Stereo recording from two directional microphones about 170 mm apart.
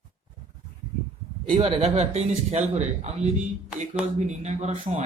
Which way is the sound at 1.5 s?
35° right (ahead or behind).